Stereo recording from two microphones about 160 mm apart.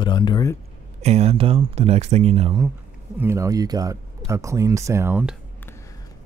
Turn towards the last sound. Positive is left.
turn(degrees=-15)  # may be behind; listen again after turning